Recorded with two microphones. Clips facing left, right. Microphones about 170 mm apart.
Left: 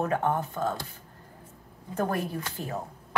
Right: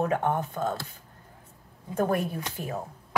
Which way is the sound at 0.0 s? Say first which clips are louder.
Right 1 dB; centre (ahead or behind).